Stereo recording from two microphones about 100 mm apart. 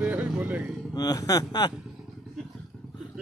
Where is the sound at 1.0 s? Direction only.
40° left (ahead or behind).